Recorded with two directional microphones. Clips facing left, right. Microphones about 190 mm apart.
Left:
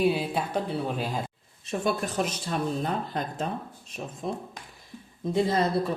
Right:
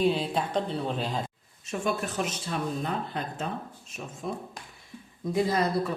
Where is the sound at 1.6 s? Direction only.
35° left (ahead or behind).